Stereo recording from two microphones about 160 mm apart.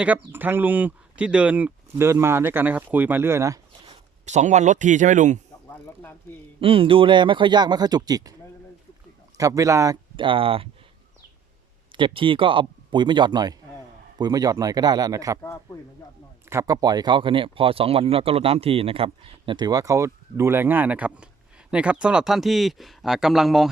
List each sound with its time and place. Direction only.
0.0 s speech: 10° right (ahead or behind)
4.3 s speech: 45° right (ahead or behind)
5.6 s music: 15° left (ahead or behind)
6.6 s speech: 35° right (ahead or behind)
9.4 s speech: 20° right (ahead or behind)
10.2 s speech: 35° right (ahead or behind)
11.9 s speech: 30° right (ahead or behind)
15.4 s a man's voice: 15° left (ahead or behind)
16.5 s speech: 20° right (ahead or behind); by 23.6 s centre (ahead or behind)